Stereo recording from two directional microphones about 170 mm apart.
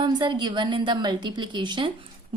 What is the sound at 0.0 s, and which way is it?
A woman's voice, 25° right (ahead or behind).